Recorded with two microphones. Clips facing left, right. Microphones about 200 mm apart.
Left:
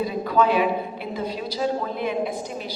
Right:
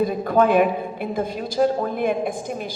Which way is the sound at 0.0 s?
50° right (ahead or behind).